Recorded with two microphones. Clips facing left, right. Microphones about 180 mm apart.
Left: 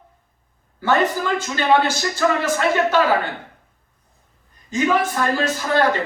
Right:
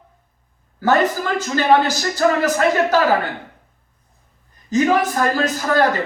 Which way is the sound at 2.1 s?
40° right (ahead or behind).